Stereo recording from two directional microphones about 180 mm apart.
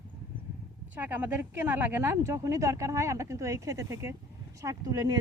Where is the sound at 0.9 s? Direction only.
10° right (ahead or behind).